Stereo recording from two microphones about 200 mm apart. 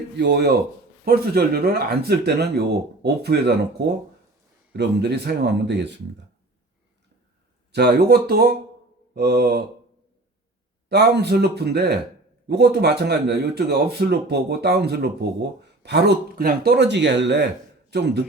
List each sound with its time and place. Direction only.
0.2 s speech: 55° right (ahead or behind)
7.7 s speech: 55° right (ahead or behind)
10.8 s speech: 55° right (ahead or behind)